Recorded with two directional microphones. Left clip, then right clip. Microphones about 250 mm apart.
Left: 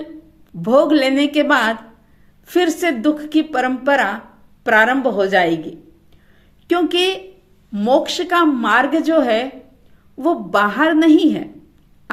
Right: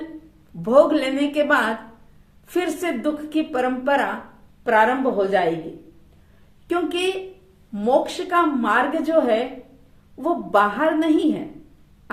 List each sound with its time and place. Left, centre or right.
0.6 s speech: left
6.7 s speech: left